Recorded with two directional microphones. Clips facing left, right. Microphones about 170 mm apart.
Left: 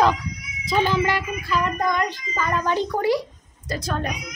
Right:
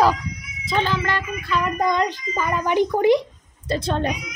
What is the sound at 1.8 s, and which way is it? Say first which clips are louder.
A child's voice: right 3 dB; 20° right (ahead or behind).